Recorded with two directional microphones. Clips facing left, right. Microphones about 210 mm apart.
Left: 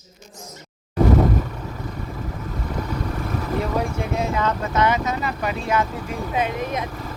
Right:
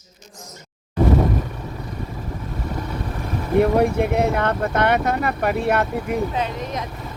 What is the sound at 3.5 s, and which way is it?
Speech, 60° right (ahead or behind).